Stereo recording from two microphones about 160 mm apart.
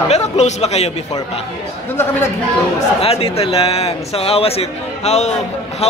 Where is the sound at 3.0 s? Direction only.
40° left (ahead or behind).